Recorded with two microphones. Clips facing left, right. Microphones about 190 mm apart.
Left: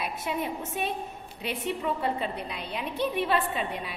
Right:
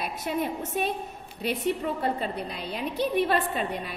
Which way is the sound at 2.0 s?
40° right (ahead or behind).